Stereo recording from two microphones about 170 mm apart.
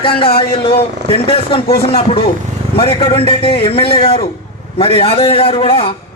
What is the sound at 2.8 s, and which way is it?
A man's voice, 35° left (ahead or behind).